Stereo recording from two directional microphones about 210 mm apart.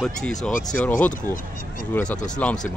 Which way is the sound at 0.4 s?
40° left (ahead or behind).